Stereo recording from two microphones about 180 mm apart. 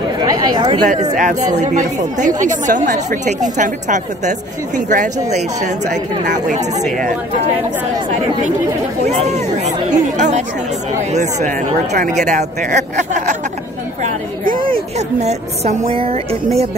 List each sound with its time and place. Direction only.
0.2 s chatter: 25° right (ahead or behind)
1.1 s a woman's voice: 45° right (ahead or behind)
9.0 s a woman's voice: 35° right (ahead or behind)
14.0 s chatter: 50° right (ahead or behind)
14.7 s speech: 40° right (ahead or behind)